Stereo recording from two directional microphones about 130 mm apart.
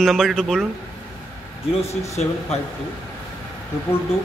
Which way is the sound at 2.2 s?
60° left (ahead or behind).